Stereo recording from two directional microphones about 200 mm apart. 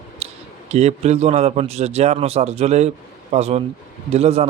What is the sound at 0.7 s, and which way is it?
Speech, 35° right (ahead or behind).